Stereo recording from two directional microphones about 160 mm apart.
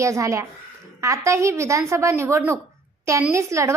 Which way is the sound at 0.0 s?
20° right (ahead or behind).